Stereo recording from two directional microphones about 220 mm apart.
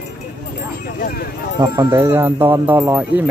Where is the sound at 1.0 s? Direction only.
45° left (ahead or behind).